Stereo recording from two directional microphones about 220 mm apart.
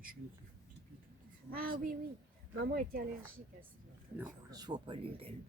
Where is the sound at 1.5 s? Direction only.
40° right (ahead or behind).